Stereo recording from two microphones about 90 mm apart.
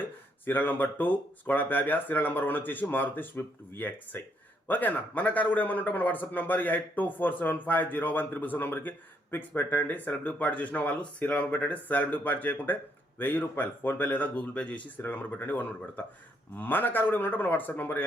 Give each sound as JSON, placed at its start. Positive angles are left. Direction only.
{"t": 0.0, "sound": "speech", "side_deg": 20}